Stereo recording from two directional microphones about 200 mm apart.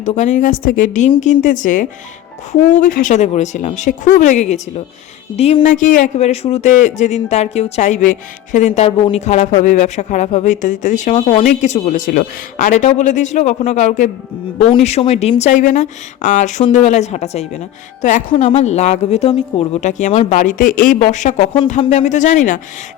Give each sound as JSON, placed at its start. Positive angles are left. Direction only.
{"t": 0.0, "sound": "speech", "side_deg": 35}